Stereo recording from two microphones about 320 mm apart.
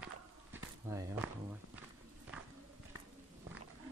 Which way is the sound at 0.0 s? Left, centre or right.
Centre.